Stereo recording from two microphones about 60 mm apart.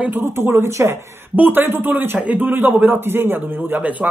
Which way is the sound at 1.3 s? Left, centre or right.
Right.